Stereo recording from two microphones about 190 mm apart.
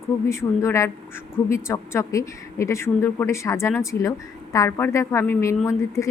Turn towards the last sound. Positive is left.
turn(degrees=15)  # may be behind; listen again after turning